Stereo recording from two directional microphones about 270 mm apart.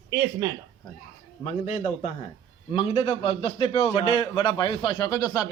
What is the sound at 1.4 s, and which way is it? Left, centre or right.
A man's voice, left.